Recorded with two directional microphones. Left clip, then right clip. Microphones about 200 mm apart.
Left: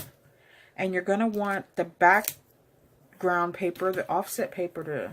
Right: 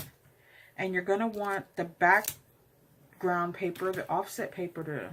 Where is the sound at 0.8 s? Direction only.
40° left (ahead or behind).